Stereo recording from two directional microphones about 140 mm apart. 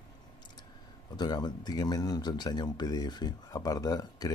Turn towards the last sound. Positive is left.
turn(degrees=25)  # may be behind; listen again after turning